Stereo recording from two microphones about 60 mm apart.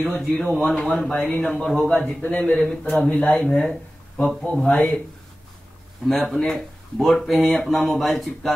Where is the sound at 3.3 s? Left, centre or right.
Left.